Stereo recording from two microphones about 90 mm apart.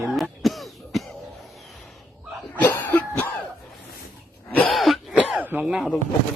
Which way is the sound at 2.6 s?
20° left (ahead or behind).